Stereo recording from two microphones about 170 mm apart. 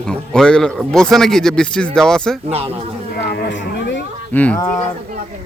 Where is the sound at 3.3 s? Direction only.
90° left.